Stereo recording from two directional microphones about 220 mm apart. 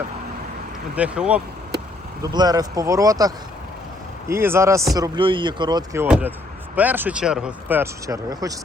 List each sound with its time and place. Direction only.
0.9 s speech: 5° right (ahead or behind)
2.2 s speech: 15° right (ahead or behind)